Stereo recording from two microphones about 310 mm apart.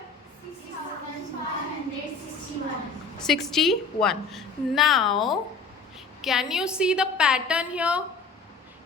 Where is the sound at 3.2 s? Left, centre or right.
Centre.